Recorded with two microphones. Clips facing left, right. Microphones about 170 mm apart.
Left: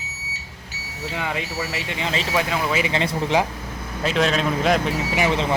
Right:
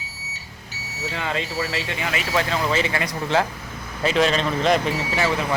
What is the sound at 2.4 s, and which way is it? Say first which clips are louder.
Speech: right 2 dB; 10° left (ahead or behind).